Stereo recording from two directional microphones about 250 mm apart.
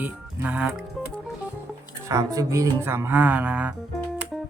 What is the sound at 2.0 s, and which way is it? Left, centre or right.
Speech, centre.